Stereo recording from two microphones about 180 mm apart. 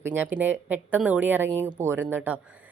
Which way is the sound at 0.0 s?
10° right (ahead or behind).